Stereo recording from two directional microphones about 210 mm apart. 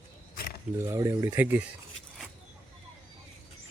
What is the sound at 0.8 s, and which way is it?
Speech, 10° right (ahead or behind).